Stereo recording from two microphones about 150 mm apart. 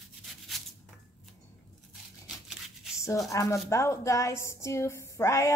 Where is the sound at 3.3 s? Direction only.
20° left (ahead or behind).